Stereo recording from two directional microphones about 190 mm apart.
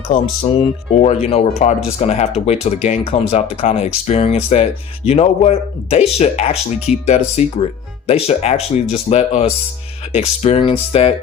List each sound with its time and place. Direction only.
0.6 s speech: 35° left (ahead or behind)